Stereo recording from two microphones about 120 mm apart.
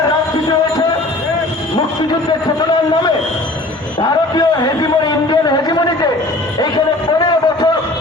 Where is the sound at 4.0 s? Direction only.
35° left (ahead or behind).